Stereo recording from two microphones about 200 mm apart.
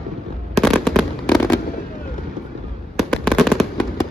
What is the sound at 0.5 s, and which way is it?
Fireworks, centre (ahead or behind).